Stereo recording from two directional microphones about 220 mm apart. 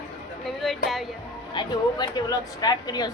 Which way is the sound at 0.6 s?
Centre (ahead or behind).